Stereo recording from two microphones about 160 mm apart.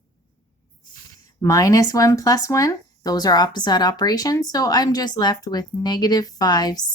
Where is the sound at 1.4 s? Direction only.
20° left (ahead or behind).